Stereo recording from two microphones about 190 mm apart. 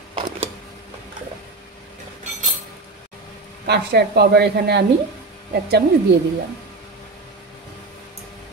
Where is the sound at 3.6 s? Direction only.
60° right (ahead or behind).